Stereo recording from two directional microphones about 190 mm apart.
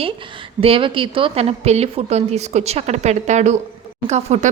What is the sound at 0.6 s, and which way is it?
Speech, 30° right (ahead or behind).